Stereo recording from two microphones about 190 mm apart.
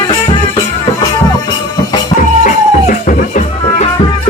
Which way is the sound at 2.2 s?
45° left (ahead or behind).